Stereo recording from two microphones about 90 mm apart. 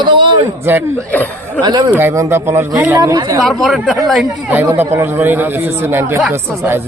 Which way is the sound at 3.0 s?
40° right (ahead or behind).